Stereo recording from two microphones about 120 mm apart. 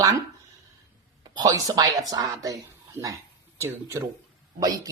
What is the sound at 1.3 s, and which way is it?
Speech, 30° right (ahead or behind).